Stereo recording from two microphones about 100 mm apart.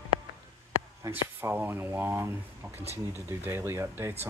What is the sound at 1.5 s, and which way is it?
Speech, 20° right (ahead or behind).